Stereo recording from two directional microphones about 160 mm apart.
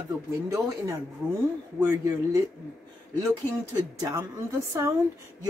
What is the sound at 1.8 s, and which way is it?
Speech, 20° right (ahead or behind).